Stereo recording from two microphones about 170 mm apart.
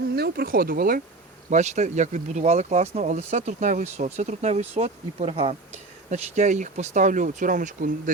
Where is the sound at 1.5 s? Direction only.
40° right (ahead or behind).